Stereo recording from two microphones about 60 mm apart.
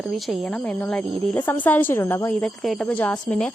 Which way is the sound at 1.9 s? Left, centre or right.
Left.